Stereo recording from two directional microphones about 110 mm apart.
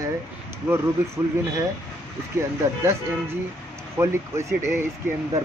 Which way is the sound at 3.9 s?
25° right (ahead or behind).